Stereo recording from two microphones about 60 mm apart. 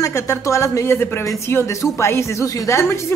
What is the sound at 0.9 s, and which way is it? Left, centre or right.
Speech, left.